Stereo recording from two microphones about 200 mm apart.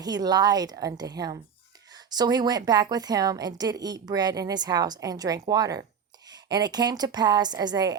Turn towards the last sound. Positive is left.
turn(degrees=-20)  # may be behind; listen again after turning